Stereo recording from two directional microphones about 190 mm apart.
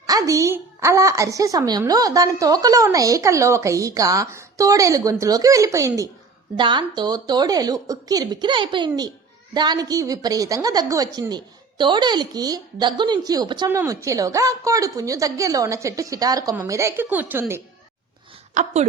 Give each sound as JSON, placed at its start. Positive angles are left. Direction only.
{"t": 0.0, "sound": "a woman's voice", "side_deg": -20}
{"t": 18.5, "sound": "a woman's voice", "side_deg": -35}